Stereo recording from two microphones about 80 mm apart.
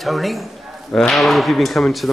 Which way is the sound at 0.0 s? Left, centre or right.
Centre.